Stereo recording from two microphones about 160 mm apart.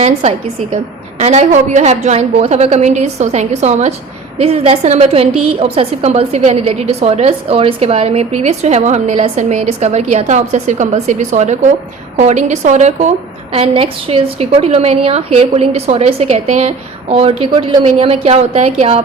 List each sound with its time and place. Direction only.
0.0 s a woman's voice: 40° right (ahead or behind)
13.5 s a woman's voice: 35° right (ahead or behind)